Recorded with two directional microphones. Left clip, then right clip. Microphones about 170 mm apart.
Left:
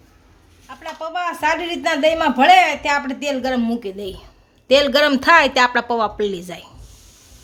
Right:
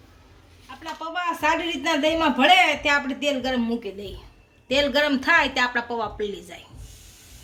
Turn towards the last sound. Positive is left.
turn(degrees=60)  # may be behind; listen again after turning